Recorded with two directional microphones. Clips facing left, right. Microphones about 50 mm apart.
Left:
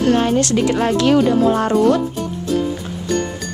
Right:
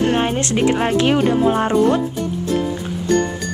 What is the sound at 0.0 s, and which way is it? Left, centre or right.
Speech, right.